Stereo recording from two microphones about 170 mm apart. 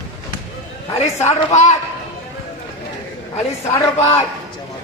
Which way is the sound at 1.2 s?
40° left (ahead or behind).